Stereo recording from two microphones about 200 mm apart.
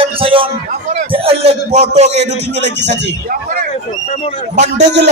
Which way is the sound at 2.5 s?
60° right (ahead or behind).